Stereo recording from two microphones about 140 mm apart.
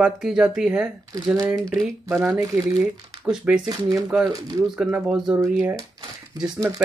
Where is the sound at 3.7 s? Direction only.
25° right (ahead or behind).